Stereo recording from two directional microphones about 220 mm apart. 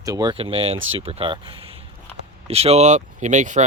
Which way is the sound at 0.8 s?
60° right (ahead or behind).